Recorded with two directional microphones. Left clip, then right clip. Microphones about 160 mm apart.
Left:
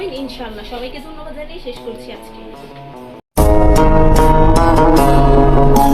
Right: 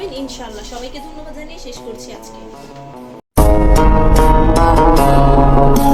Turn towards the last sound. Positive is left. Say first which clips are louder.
# left 1 dB
turn(degrees=0)  # may be behind; listen again after turning